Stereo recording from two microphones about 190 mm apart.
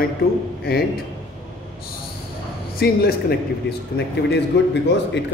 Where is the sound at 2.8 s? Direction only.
55° left (ahead or behind).